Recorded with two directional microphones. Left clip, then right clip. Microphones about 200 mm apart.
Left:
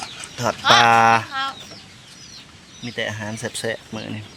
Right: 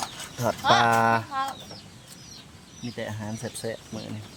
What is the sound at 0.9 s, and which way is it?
Speech, 5° right (ahead or behind).